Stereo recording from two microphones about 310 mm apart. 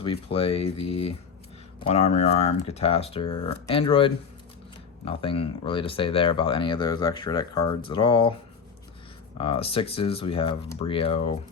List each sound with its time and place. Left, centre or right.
0.0 s speech: centre
9.4 s speech: centre